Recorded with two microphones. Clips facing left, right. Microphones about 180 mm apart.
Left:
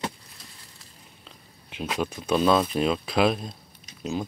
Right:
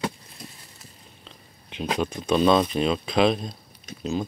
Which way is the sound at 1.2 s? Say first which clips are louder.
Right 1 dB; 5° left (ahead or behind).